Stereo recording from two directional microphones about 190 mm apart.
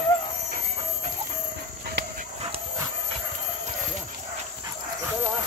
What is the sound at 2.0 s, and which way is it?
Dog, 65° right (ahead or behind).